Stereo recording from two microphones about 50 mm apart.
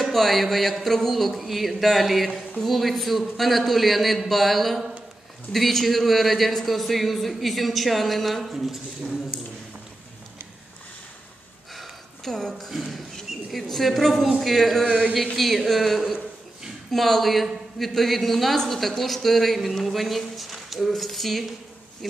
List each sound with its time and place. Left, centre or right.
0.0 s a sound: centre
0.8 s a man's voice: centre
12.3 s a man's voice: centre
14.9 s speech: right
15.3 s a man's voice: centre